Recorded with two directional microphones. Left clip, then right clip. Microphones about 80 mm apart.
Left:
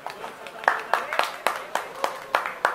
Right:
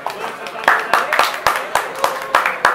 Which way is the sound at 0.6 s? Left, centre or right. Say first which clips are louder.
Right 9 dB; centre.